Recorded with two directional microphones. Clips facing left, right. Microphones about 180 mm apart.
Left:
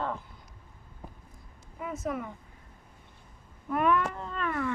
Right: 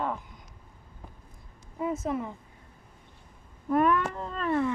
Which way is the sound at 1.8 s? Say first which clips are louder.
Right 4 dB; 25° right (ahead or behind).